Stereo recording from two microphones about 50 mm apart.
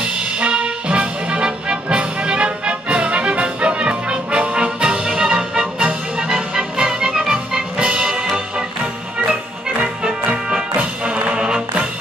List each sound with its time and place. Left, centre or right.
0.0 s music: right